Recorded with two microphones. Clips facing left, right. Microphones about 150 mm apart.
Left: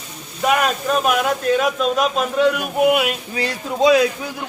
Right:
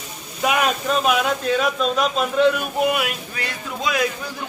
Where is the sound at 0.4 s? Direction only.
Centre (ahead or behind).